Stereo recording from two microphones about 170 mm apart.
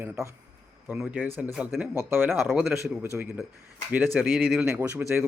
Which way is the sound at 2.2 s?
Centre (ahead or behind).